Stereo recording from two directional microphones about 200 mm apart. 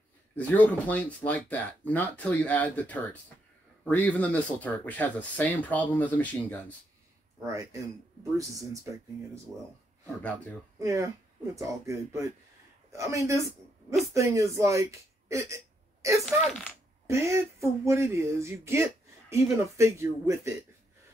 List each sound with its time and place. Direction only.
0.4 s speech: 10° left (ahead or behind)
7.4 s speech: 15° right (ahead or behind)
10.8 s speech: 15° right (ahead or behind)
15.5 s hiccup: 15° right (ahead or behind)
17.1 s speech: 15° right (ahead or behind)